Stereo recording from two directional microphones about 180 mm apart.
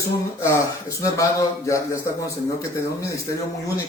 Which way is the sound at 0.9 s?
20° left (ahead or behind).